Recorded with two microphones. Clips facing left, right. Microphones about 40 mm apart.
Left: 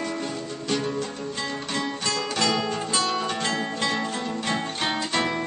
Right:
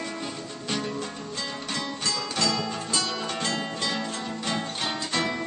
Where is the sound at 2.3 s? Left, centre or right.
Left.